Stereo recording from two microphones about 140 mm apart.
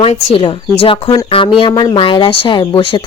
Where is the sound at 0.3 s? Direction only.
40° left (ahead or behind).